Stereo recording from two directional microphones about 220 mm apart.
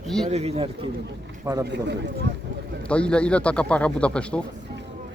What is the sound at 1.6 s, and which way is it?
Speech, 50° right (ahead or behind).